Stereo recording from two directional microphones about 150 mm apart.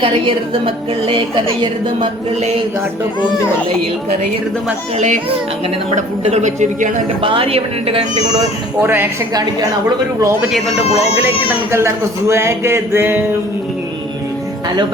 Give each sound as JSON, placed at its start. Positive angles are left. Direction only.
{"t": 0.0, "sound": "a woman's voice", "side_deg": -35}
{"t": 2.4, "sound": "speech", "side_deg": -45}
{"t": 6.2, "sound": "a woman's voice", "side_deg": -50}
{"t": 7.2, "sound": "a woman's voice", "side_deg": -35}
{"t": 8.4, "sound": "a sound", "side_deg": -15}
{"t": 9.3, "sound": "a woman's voice", "side_deg": -25}
{"t": 12.3, "sound": "a sound", "side_deg": -20}